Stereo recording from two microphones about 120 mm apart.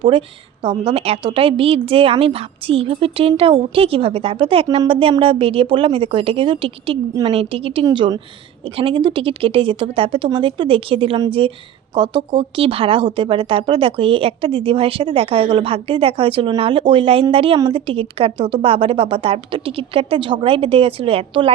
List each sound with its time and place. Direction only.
0.0 s a woman's voice: 45° right (ahead or behind)
7.9 s a woman's voice: 40° right (ahead or behind)